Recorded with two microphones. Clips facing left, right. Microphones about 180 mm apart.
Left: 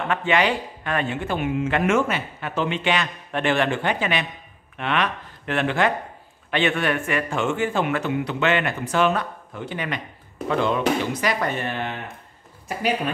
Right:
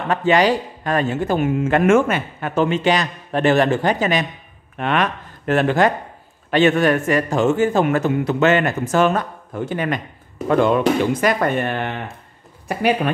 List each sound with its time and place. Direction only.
0.1 s a man's voice: 40° right (ahead or behind); by 13.1 s 60° right (ahead or behind)